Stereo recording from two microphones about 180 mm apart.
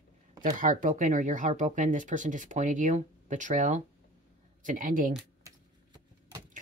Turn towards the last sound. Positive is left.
turn(degrees=-50)  # may be behind; listen again after turning